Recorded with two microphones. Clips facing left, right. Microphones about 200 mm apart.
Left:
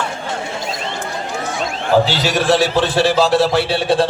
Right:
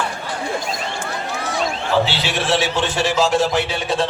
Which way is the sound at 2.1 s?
40° left (ahead or behind).